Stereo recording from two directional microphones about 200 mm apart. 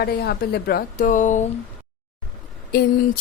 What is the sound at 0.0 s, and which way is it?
A woman's voice, 55° left (ahead or behind).